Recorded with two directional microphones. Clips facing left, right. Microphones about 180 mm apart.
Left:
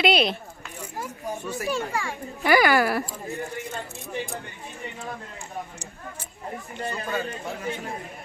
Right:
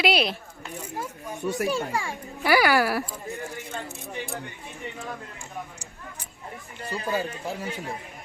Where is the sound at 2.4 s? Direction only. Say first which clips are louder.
Left 1 dB; 5° right (ahead or behind).